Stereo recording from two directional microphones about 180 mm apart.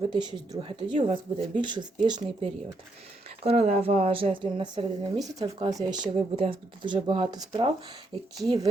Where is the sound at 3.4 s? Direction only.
35° right (ahead or behind).